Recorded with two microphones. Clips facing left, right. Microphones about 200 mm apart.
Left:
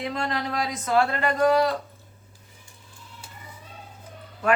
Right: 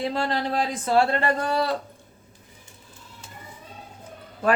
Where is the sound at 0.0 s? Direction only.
30° right (ahead or behind).